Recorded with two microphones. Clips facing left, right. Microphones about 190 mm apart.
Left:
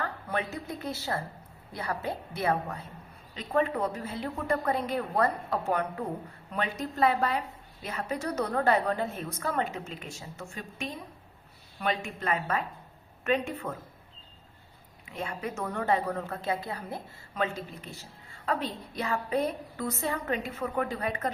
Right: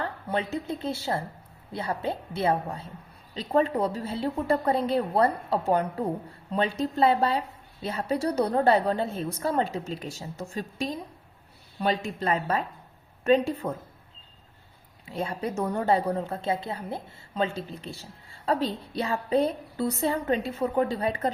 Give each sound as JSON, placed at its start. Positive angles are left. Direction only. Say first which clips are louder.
{"t": 0.0, "sound": "a woman's voice", "louder": "right 3 dB", "side_deg": -25}
{"t": 15.0, "sound": "speech", "louder": "right 5 dB", "side_deg": -35}